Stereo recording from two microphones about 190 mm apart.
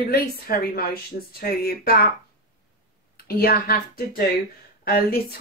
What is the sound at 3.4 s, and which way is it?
Speech, 50° left (ahead or behind).